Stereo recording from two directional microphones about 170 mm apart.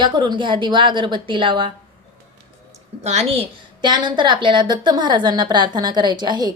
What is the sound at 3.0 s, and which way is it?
Speech, 40° right (ahead or behind).